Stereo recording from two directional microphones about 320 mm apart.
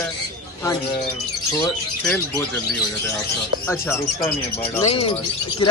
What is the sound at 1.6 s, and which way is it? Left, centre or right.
Speech, centre.